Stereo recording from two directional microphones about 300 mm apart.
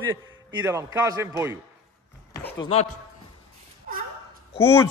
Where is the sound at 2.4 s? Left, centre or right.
Centre.